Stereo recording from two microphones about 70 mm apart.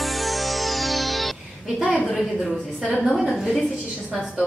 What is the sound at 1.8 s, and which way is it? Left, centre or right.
Speech, centre.